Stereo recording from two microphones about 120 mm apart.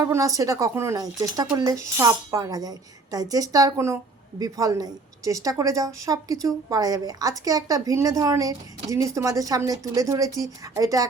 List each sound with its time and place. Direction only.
0.0 s a woman's voice: 25° right (ahead or behind)